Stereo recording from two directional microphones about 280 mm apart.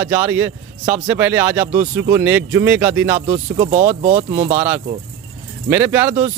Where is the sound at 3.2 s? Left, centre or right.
Centre.